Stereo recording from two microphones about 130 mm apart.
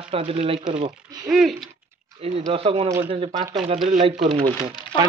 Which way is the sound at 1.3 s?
5° right (ahead or behind).